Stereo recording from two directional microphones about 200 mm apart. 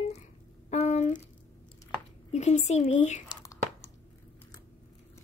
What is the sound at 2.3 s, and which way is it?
Speech, 35° left (ahead or behind).